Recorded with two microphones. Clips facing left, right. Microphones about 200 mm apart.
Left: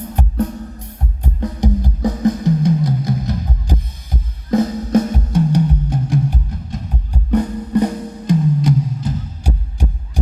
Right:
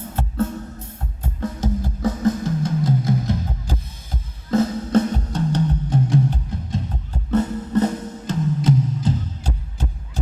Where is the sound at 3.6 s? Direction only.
15° left (ahead or behind).